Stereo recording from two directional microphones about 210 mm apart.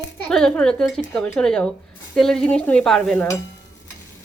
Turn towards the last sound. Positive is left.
turn(degrees=5)  # may be behind; listen again after turning